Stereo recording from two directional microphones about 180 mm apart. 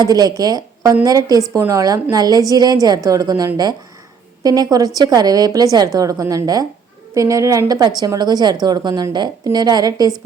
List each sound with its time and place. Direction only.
0.0 s a woman's voice: 20° right (ahead or behind)